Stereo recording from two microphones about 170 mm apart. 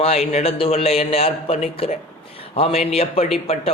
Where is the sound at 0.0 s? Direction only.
35° left (ahead or behind).